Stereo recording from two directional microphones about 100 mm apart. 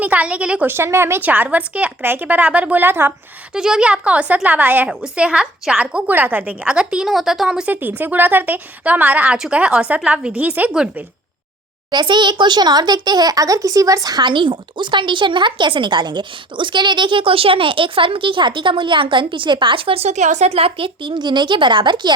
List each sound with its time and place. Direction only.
0.0 s a woman's voice: 15° right (ahead or behind)
0.7 s a woman's voice: 25° right (ahead or behind)
3.5 s a woman's voice: 5° right (ahead or behind)
7.7 s a woman's voice: 20° right (ahead or behind)
11.9 s a child's voice: 50° right (ahead or behind)